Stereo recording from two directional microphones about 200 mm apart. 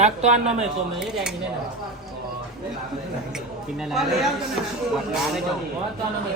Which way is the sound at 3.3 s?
Centre (ahead or behind).